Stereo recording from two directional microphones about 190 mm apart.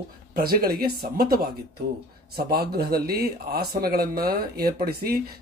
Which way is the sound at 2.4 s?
55° right (ahead or behind).